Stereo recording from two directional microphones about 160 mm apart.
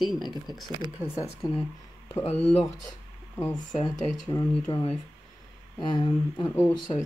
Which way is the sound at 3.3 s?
20° left (ahead or behind).